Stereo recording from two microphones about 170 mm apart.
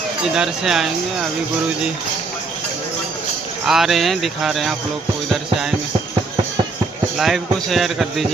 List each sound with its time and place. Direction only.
0.3 s speech: 5° right (ahead or behind)
3.7 s speech: centre (ahead or behind)
7.2 s speech: centre (ahead or behind)